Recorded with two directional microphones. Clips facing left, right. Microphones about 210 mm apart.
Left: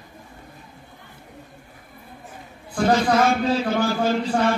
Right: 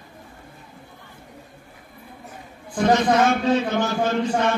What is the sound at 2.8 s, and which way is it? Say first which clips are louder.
A man's voice: right 1 dB; 30° left (ahead or behind).